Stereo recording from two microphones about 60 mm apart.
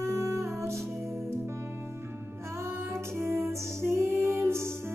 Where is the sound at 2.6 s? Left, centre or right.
Right.